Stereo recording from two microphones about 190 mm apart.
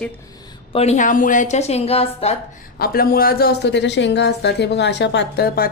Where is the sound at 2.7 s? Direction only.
55° left (ahead or behind).